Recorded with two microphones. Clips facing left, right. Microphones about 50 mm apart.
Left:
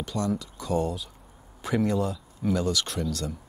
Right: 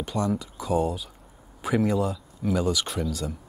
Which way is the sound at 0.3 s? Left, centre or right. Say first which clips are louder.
Right 2 dB; centre.